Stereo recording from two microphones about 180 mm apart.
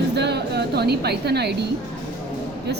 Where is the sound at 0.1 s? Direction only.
70° right (ahead or behind).